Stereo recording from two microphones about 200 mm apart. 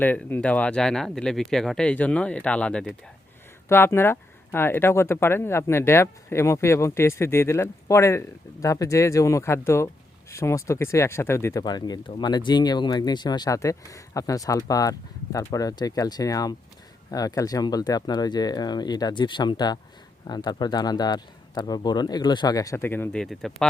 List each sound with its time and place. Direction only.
0.0 s speech: 10° left (ahead or behind)